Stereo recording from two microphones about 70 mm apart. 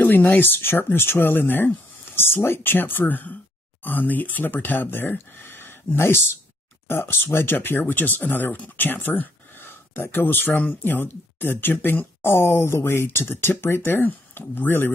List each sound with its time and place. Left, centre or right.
0.0 s speech: left